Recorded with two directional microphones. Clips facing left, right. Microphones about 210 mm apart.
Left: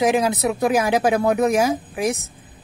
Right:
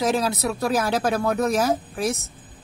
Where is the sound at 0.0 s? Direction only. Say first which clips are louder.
Left 4 dB; 15° left (ahead or behind).